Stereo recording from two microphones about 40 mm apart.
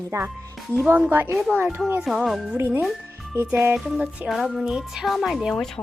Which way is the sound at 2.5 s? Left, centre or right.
Right.